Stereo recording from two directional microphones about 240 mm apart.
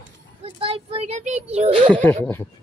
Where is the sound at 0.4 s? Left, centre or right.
Right.